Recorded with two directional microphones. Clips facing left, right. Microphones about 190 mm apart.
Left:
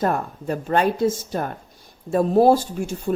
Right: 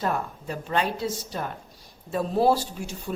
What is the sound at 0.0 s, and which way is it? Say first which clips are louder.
Speech: left 5 dB; 50° left (ahead or behind).